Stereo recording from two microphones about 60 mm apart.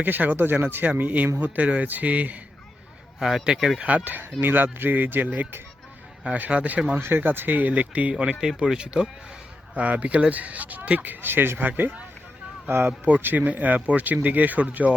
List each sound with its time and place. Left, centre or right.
0.0 s speech: right
3.2 s speech: centre
3.8 s speech: right
6.2 s speech: right
7.0 s speech: right
8.1 s speech: centre